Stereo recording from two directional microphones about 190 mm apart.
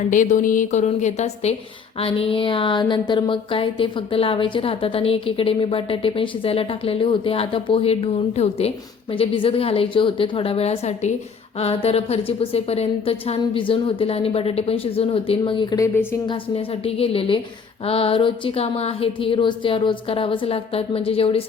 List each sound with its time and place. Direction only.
0.1 s a woman's voice: 40° left (ahead or behind)